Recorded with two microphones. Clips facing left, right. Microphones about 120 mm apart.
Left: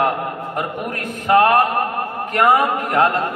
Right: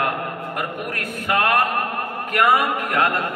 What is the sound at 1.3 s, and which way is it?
Speech, 30° left (ahead or behind).